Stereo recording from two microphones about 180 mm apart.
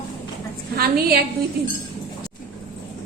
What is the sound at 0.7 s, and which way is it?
Speech, 60° right (ahead or behind).